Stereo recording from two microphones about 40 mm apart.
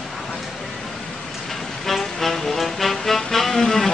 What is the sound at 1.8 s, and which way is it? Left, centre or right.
Music, centre.